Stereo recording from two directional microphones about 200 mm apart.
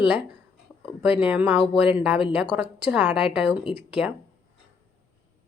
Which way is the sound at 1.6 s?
25° left (ahead or behind).